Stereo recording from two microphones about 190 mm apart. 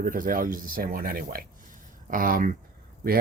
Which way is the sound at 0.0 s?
45° right (ahead or behind).